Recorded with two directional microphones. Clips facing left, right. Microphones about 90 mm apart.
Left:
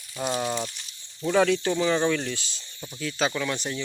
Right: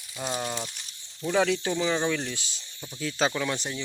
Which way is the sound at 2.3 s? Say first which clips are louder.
Left 2 dB; 20° right (ahead or behind).